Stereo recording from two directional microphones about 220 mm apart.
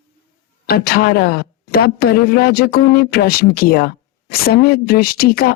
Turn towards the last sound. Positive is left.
turn(degrees=45)  # may be behind; listen again after turning